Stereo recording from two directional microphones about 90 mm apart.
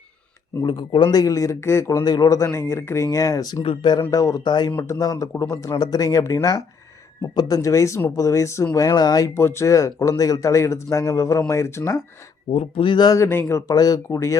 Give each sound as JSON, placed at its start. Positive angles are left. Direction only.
{"t": 0.6, "sound": "a man's voice", "side_deg": 60}
{"t": 2.0, "sound": "speech", "side_deg": 50}
{"t": 2.4, "sound": "a man's voice", "side_deg": 30}
{"t": 4.4, "sound": "speech", "side_deg": 50}
{"t": 4.9, "sound": "a man's voice", "side_deg": 40}
{"t": 9.0, "sound": "speech", "side_deg": 45}
{"t": 9.3, "sound": "a man's voice", "side_deg": 30}
{"t": 12.5, "sound": "speech", "side_deg": 80}
{"t": 13.1, "sound": "a man's voice", "side_deg": 30}